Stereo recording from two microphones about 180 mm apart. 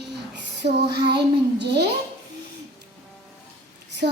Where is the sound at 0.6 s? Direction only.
65° right (ahead or behind).